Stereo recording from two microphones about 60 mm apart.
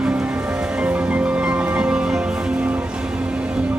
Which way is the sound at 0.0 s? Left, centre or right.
Centre.